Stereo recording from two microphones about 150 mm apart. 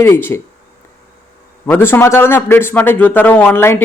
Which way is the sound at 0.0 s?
15° left (ahead or behind).